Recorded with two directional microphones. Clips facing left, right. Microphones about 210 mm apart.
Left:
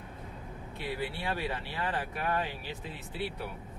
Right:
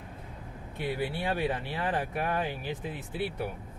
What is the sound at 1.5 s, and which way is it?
Speech, 45° right (ahead or behind).